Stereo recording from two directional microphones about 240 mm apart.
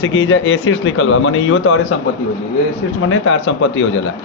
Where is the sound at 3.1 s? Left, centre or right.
Left.